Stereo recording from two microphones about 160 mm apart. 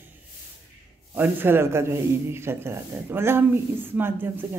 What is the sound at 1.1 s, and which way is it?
Speech, 10° right (ahead or behind).